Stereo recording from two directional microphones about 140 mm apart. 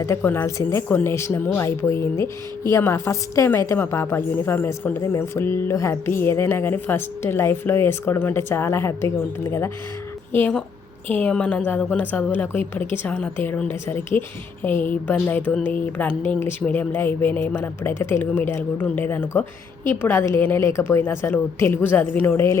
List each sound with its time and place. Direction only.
0.0 s a woman's voice: 20° left (ahead or behind)